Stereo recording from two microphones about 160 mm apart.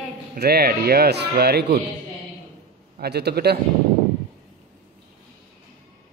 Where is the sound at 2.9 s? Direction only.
85° right.